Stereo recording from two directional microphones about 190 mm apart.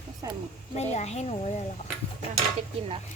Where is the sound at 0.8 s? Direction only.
35° left (ahead or behind).